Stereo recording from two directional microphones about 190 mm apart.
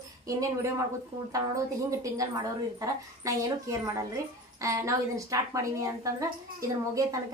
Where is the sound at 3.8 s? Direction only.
15° right (ahead or behind).